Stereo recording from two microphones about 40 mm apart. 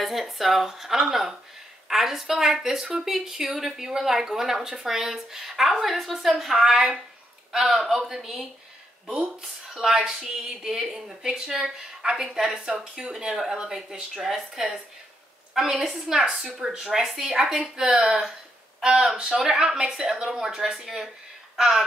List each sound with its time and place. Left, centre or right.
0.0 s speech: centre
19.3 s speech: centre